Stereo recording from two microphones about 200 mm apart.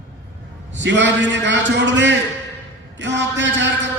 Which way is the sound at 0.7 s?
60° right (ahead or behind).